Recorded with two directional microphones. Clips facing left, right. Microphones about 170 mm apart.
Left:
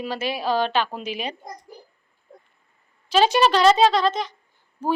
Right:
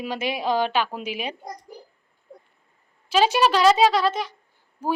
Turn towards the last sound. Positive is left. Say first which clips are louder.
# left 2 dB
turn(degrees=-10)  # may be behind; listen again after turning